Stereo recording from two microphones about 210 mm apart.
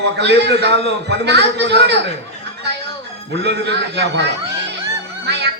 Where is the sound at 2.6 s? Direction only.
55° right (ahead or behind).